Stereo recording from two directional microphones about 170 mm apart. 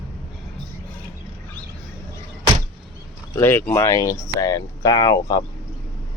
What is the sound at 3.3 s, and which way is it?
Speech, 15° left (ahead or behind).